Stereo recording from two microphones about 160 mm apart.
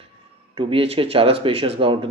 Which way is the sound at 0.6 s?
35° right (ahead or behind).